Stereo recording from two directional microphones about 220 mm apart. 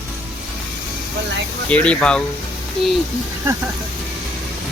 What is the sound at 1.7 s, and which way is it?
Speech, 5° left (ahead or behind).